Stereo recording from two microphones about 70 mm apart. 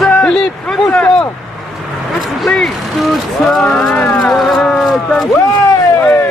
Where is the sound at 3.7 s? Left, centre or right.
Left.